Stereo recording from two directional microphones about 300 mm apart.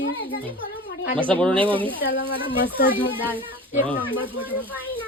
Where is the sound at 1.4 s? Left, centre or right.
Centre.